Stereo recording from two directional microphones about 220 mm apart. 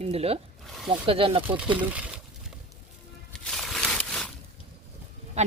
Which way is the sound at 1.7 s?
5° right (ahead or behind).